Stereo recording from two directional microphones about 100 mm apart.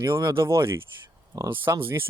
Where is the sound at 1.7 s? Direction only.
25° right (ahead or behind).